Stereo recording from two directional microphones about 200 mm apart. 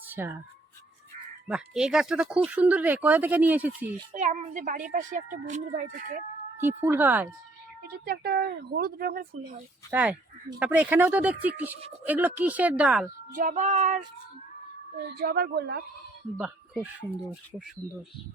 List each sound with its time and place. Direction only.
0.1 s speech: 10° right (ahead or behind)
1.5 s speech: 5° right (ahead or behind)
4.1 s speech: 40° right (ahead or behind)
6.6 s speech: 10° right (ahead or behind)
7.8 s speech: 50° right (ahead or behind)
9.9 s speech: 5° right (ahead or behind)
13.3 s speech: 40° right (ahead or behind)
14.9 s speech: 55° right (ahead or behind)